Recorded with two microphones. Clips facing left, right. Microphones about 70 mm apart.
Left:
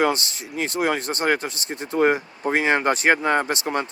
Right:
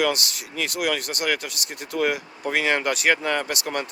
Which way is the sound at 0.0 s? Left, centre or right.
Left.